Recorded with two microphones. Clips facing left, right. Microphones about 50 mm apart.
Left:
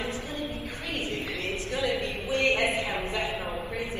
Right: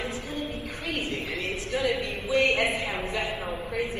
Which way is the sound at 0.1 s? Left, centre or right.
Left.